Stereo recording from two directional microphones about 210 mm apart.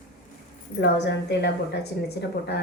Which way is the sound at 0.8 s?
55° left (ahead or behind).